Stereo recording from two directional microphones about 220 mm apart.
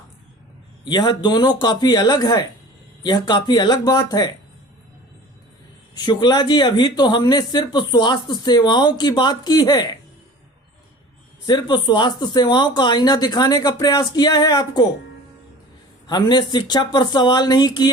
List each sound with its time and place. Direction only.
0.9 s speech: 20° left (ahead or behind)
6.0 s speech: 20° left (ahead or behind)
11.4 s speech: 20° left (ahead or behind)
16.0 s speech: 20° left (ahead or behind)